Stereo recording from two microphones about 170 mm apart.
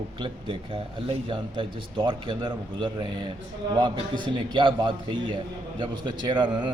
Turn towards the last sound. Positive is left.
turn(degrees=-25)  # may be behind; listen again after turning